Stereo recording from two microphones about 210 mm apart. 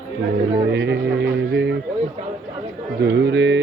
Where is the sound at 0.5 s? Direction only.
55° right (ahead or behind).